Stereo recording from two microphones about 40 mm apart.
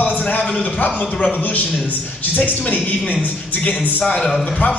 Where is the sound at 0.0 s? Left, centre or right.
Left.